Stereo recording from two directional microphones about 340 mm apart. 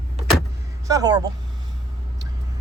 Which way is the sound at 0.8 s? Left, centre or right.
Centre.